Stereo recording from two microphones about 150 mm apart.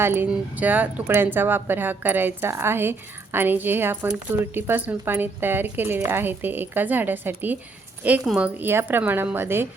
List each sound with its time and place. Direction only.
0.0 s speech: 15° right (ahead or behind)